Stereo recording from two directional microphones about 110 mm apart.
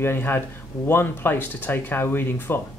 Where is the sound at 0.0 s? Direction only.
20° left (ahead or behind).